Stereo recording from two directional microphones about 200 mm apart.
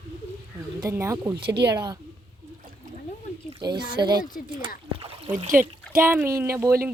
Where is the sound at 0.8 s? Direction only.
15° right (ahead or behind).